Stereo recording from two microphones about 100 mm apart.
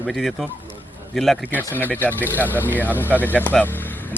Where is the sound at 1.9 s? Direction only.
15° left (ahead or behind).